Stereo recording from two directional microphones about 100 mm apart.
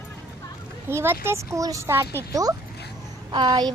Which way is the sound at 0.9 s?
25° right (ahead or behind).